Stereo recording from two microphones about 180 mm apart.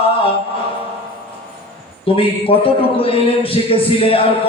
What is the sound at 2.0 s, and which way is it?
A man's voice, 30° left (ahead or behind).